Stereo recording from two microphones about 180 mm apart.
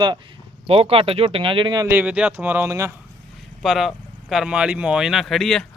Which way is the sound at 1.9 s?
10° right (ahead or behind).